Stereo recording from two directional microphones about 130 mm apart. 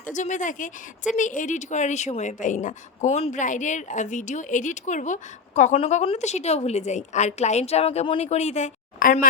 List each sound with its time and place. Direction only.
0.0 s speech: 70° left (ahead or behind); by 3.4 s 55° left (ahead or behind)
3.4 s speech: 75° left (ahead or behind)
5.7 s a woman's voice: 50° left (ahead or behind); by 9.1 s 80° left